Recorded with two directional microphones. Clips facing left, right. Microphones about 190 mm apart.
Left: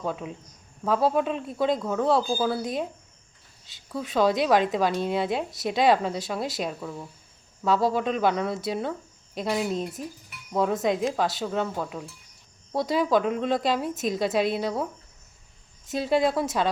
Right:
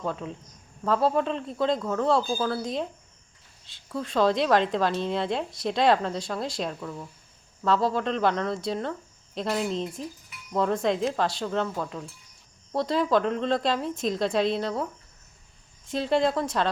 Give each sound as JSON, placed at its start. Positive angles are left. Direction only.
{"t": 0.0, "sound": "a woman's voice", "side_deg": 5}
{"t": 15.9, "sound": "a woman's voice", "side_deg": 5}